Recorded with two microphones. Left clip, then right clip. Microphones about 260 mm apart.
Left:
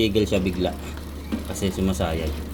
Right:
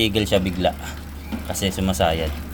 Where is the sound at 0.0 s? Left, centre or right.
Right.